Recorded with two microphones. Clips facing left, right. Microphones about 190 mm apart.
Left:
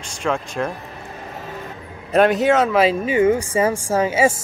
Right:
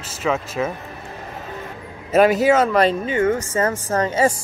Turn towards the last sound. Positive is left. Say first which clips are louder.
# left 1 dB
turn(degrees=5)  # may be behind; listen again after turning